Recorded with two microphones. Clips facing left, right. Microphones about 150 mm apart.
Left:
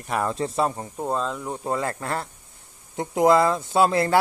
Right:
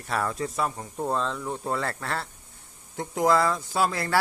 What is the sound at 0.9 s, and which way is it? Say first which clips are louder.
A man's voice: left 1 dB; 10° left (ahead or behind).